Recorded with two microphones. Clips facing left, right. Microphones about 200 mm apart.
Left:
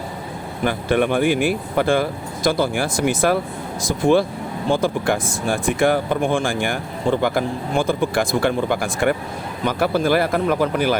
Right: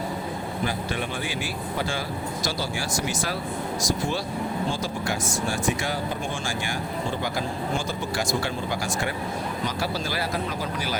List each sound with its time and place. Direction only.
0.6 s speech: 60° left (ahead or behind)